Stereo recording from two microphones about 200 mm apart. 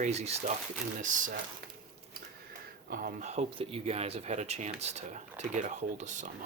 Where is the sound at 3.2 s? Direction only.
30° right (ahead or behind).